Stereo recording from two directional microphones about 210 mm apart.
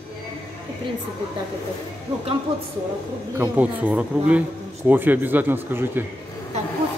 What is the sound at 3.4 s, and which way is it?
Speech, 5° right (ahead or behind).